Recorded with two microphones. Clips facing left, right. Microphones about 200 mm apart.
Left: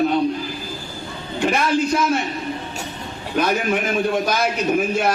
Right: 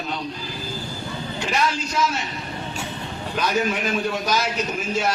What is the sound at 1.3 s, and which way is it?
Speech, 55° left (ahead or behind).